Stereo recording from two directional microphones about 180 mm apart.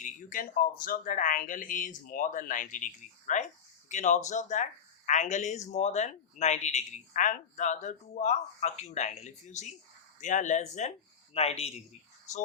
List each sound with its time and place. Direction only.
0.0 s speech: 50° left (ahead or behind)